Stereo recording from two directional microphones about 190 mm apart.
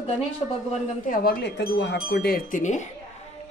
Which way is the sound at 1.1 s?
50° left (ahead or behind).